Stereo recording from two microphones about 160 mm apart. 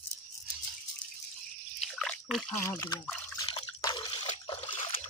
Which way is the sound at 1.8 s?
Centre (ahead or behind).